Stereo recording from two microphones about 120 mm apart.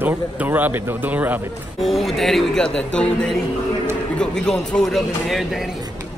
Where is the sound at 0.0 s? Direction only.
15° right (ahead or behind).